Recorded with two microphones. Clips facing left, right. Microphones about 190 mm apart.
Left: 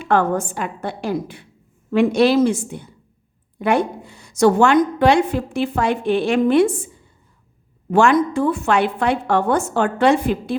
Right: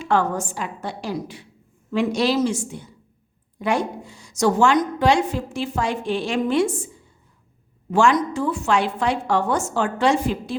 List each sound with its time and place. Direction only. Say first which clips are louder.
0.0 s a woman's voice: left 3 dB; 55° left (ahead or behind)
7.9 s a woman's voice: left 3 dB; 55° left (ahead or behind)